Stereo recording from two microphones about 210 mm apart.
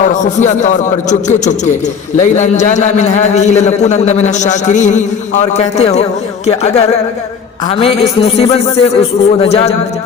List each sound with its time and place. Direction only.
0.0 s a man's voice: 35° left (ahead or behind)